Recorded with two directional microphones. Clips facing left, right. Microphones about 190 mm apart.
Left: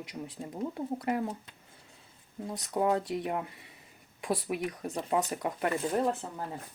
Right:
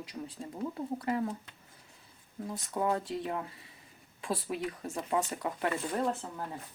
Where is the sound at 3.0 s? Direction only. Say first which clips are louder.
Left 3 dB; 20° left (ahead or behind).